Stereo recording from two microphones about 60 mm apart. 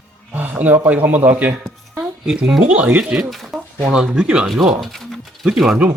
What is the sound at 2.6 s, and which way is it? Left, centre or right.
Speech, right.